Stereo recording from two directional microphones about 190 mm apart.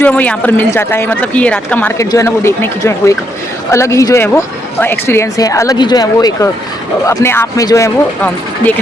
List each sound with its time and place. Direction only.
0.0 s speech: 10° left (ahead or behind)